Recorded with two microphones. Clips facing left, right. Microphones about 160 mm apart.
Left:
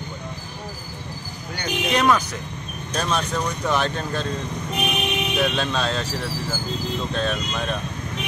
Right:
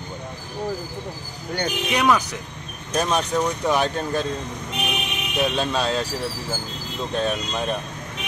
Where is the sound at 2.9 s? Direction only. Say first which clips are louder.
Right 3 dB; 15° right (ahead or behind).